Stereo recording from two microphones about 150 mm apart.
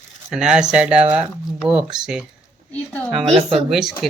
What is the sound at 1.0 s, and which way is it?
Speech, 40° right (ahead or behind).